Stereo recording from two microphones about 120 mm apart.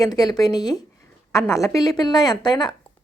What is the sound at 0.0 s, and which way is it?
A woman's voice, 35° left (ahead or behind).